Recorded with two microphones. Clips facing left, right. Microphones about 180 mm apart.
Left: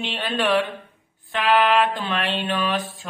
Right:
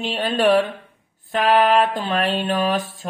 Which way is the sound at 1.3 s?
40° right (ahead or behind).